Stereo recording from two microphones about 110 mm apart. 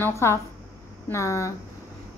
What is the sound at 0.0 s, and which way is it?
Speech, 25° left (ahead or behind).